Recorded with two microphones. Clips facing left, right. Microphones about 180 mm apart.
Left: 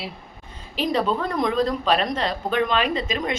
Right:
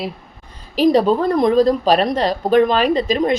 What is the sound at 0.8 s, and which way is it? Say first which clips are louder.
A woman's voice: right 9 dB; 40° right (ahead or behind).